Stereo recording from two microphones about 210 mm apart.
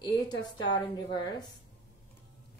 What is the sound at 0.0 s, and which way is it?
A woman's voice, 20° left (ahead or behind).